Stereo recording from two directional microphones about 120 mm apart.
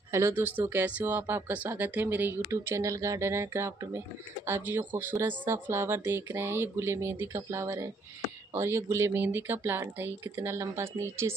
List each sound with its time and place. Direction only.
0.1 s speech: 20° right (ahead or behind)